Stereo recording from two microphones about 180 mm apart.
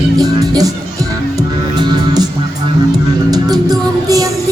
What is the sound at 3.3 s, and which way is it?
Music, 20° right (ahead or behind).